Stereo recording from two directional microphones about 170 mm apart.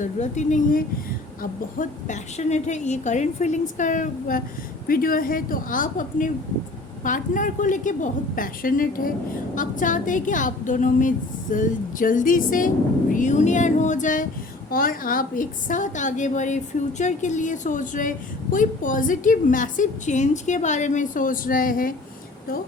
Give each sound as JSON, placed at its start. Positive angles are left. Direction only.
{"t": 0.0, "sound": "a woman's voice", "side_deg": 45}